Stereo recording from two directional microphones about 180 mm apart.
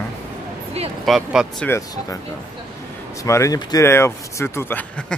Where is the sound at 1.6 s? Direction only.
15° left (ahead or behind).